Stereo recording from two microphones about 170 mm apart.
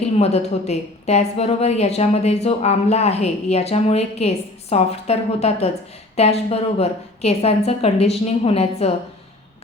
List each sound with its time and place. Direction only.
0.0 s a woman's voice: 40° left (ahead or behind)